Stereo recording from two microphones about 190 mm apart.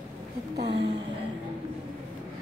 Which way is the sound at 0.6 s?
65° right (ahead or behind).